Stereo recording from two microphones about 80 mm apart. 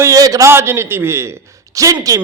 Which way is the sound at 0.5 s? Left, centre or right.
Right.